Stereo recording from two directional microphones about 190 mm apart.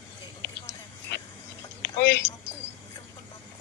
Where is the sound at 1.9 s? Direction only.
65° left (ahead or behind).